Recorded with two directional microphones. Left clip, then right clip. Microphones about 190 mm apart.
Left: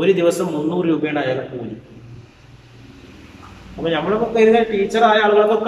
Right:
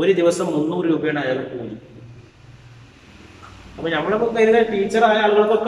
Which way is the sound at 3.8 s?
10° left (ahead or behind).